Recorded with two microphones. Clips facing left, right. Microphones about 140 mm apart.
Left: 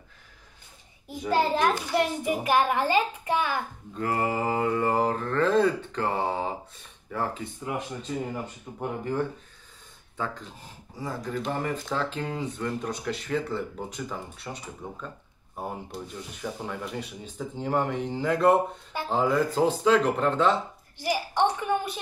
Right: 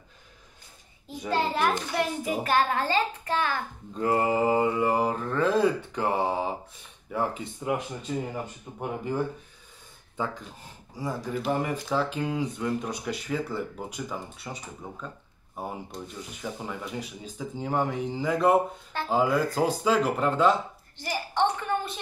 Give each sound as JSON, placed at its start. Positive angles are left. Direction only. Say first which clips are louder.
{"t": 1.3, "sound": "a child's voice", "louder": "left 2 dB", "side_deg": 20}
{"t": 1.8, "sound": "a child's voice", "louder": "left 2 dB", "side_deg": 10}
{"t": 4.0, "sound": "mantra", "louder": "right 3 dB", "side_deg": -20}
{"t": 8.7, "sound": "mantra", "louder": "left 1 dB", "side_deg": -10}
{"t": 11.1, "sound": "speech", "louder": "right 2 dB", "side_deg": -5}
{"t": 15.5, "sound": "speech", "louder": "left 1 dB", "side_deg": 0}
{"t": 21.0, "sound": "a child's voice", "louder": "left 2 dB", "side_deg": 10}